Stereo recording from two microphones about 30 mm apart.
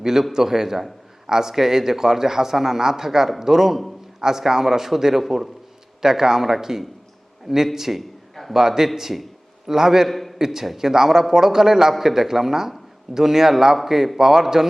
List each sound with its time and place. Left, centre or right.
0.0 s a man's voice: centre
10.1 s a man's voice: centre
10.3 s a man's voice: centre